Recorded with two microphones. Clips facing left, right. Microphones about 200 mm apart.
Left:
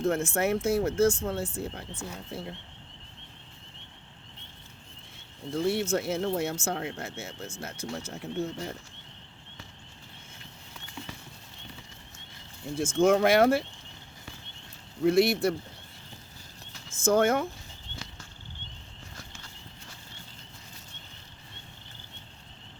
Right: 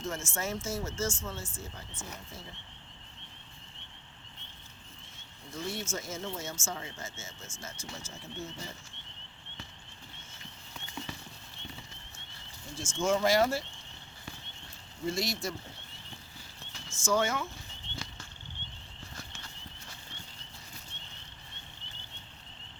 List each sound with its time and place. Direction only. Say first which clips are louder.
0.0 s speech: left 10 dB; 60° left (ahead or behind)
5.5 s speech: left 10 dB; 65° left (ahead or behind)
12.7 s speech: left 7 dB; 60° left (ahead or behind)
15.0 s speech: left 11 dB; 60° left (ahead or behind)
17.0 s speech: left 6 dB; 55° left (ahead or behind)